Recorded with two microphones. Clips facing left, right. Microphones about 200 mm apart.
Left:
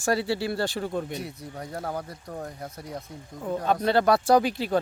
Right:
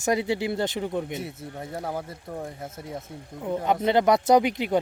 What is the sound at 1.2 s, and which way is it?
Speech, 5° right (ahead or behind).